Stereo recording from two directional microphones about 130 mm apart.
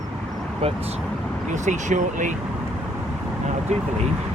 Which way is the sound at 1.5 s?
70° right (ahead or behind).